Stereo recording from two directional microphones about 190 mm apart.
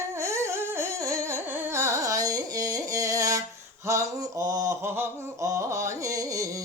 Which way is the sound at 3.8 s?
15° right (ahead or behind).